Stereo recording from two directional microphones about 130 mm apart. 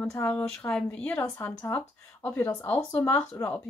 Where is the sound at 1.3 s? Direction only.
20° left (ahead or behind).